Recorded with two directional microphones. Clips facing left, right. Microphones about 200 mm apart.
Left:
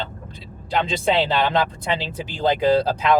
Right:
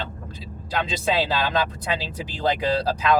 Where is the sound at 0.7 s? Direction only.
25° left (ahead or behind).